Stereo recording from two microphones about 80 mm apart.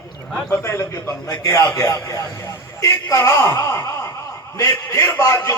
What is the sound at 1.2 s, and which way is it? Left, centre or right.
A man's voice, left.